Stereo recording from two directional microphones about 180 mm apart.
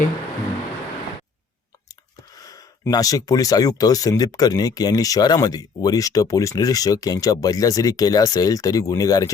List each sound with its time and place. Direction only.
1.9 s speech: 20° left (ahead or behind)